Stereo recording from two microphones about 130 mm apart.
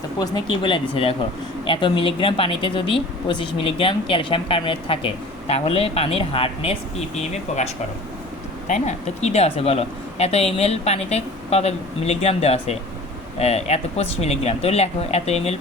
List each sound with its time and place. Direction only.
0.2 s speech: 35° left (ahead or behind)
7.2 s speech: 60° left (ahead or behind)